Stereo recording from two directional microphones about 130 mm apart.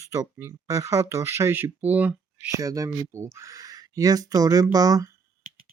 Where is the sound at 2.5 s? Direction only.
25° right (ahead or behind).